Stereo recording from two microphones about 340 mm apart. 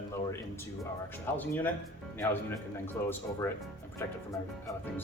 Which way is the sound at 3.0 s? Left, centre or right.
Centre.